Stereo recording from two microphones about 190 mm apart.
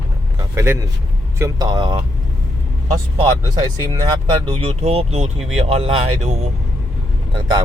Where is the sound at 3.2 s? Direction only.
25° right (ahead or behind).